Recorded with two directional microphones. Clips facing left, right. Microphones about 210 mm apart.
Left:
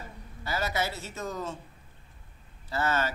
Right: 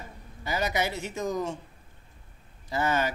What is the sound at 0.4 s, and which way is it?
A man's voice, 15° right (ahead or behind).